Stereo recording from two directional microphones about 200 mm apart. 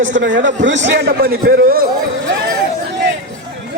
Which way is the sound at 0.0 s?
65° right (ahead or behind).